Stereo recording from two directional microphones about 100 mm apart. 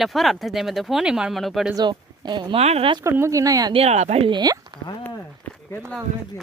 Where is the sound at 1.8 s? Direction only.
50° right (ahead or behind).